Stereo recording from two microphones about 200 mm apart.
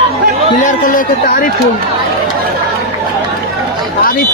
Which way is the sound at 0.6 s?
40° left (ahead or behind).